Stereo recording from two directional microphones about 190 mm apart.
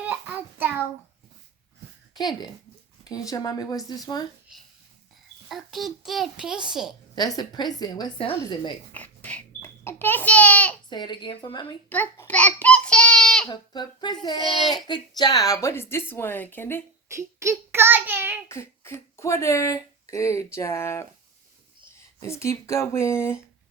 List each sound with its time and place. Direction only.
0.0 s child singing: 10° right (ahead or behind)
2.1 s a woman's voice: 20° left (ahead or behind)
5.5 s a child's voice: centre (ahead or behind)
7.2 s a woman's voice: 20° left (ahead or behind)
8.9 s a child's voice: 10° left (ahead or behind)
10.8 s a woman's voice: 25° left (ahead or behind)
11.9 s a sound: 10° left (ahead or behind)
13.5 s a woman's voice: 20° left (ahead or behind)
17.1 s a child's voice: 15° right (ahead or behind)
18.4 s speech: 15° left (ahead or behind)
22.2 s speech: 15° left (ahead or behind)